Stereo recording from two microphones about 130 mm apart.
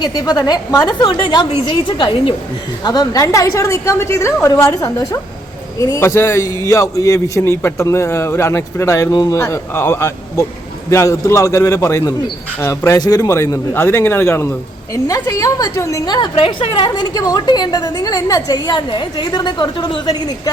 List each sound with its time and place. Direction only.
0.0 s a woman's voice: 30° left (ahead or behind)